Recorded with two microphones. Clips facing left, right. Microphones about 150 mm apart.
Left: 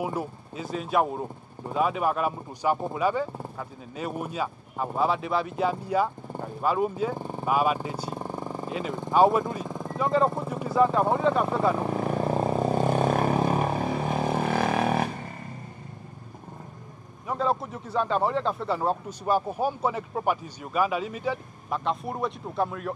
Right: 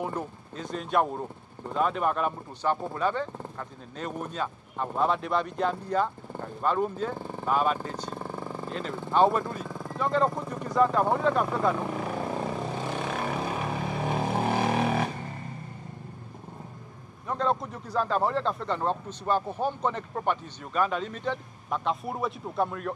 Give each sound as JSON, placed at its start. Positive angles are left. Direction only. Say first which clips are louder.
{"t": 0.0, "sound": "speech", "louder": "left 2 dB", "side_deg": 10}
{"t": 9.9, "sound": "speech", "louder": "left 2 dB", "side_deg": 5}
{"t": 11.8, "sound": "vehicle", "louder": "left 4 dB", "side_deg": 30}
{"t": 14.5, "sound": "a sound", "louder": "left 1 dB", "side_deg": 55}
{"t": 17.3, "sound": "speech", "louder": "left 1 dB", "side_deg": 5}